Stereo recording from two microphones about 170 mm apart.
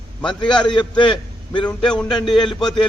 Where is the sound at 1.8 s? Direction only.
5° left (ahead or behind).